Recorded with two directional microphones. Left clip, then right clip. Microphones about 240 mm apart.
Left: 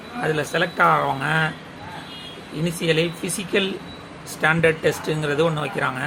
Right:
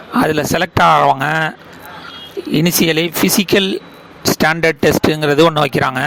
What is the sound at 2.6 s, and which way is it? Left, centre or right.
Speech, right.